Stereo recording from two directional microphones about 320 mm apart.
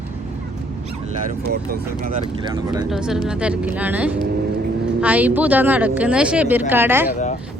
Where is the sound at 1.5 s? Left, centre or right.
Right.